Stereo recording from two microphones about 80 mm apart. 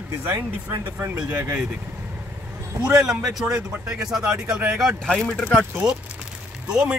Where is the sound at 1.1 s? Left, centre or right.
Right.